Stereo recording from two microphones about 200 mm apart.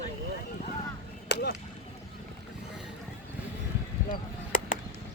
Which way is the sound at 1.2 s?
60° left (ahead or behind).